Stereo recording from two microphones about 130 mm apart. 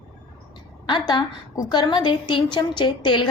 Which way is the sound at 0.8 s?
35° left (ahead or behind).